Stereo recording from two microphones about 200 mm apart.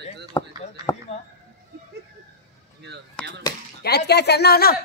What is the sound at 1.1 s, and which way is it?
Speech, 30° left (ahead or behind).